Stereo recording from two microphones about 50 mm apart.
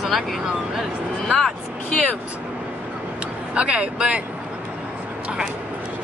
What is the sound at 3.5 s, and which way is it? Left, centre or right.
Speech, right.